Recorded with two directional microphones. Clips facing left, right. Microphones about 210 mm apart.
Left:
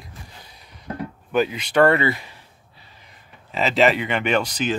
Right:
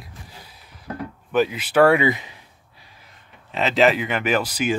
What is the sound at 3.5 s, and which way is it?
Speech, centre (ahead or behind).